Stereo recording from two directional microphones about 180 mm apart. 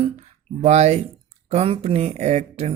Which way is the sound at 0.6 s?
40° right (ahead or behind).